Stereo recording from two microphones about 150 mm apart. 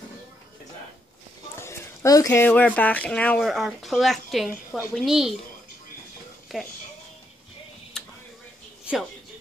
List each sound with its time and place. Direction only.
1.6 s speech: 20° left (ahead or behind); by 5.3 s centre (ahead or behind)
6.5 s speech: centre (ahead or behind)
8.0 s a sound: 5° left (ahead or behind)